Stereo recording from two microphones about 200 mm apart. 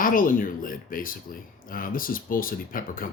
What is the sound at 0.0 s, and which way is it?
Speech, 45° left (ahead or behind).